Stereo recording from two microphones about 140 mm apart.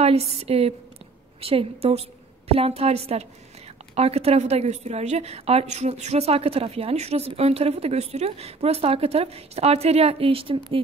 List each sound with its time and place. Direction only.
0.0 s a woman's voice: 45° right (ahead or behind)